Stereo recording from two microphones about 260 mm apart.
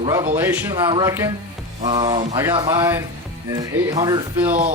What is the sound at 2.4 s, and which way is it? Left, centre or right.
Speech, centre.